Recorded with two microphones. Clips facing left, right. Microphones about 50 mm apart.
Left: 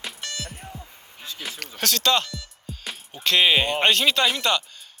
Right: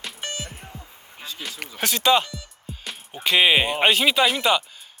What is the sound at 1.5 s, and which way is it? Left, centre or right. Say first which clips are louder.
Speech: even; centre.